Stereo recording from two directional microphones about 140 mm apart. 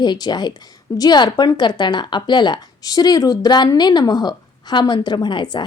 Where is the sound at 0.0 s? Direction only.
30° left (ahead or behind).